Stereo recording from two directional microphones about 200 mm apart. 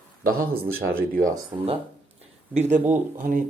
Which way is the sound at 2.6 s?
40° right (ahead or behind).